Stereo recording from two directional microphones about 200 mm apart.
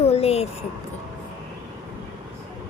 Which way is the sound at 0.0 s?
30° left (ahead or behind).